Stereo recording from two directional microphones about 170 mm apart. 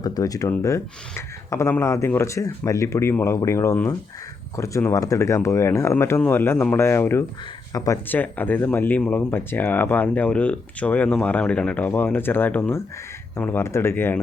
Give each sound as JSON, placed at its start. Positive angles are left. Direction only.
{"t": 0.0, "sound": "speech", "side_deg": 20}